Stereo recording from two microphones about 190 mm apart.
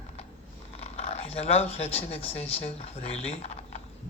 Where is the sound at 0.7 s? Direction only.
35° left (ahead or behind).